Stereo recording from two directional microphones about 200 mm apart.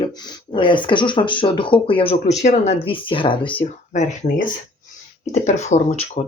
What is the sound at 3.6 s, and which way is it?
Speech, 35° left (ahead or behind).